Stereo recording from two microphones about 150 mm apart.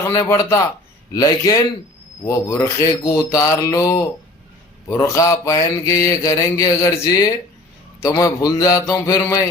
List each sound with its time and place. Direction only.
0.1 s mantra: 20° left (ahead or behind)